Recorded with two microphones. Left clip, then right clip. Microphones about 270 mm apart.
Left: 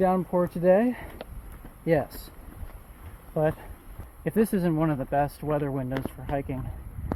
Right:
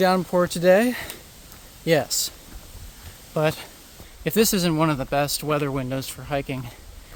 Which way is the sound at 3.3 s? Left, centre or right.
Right.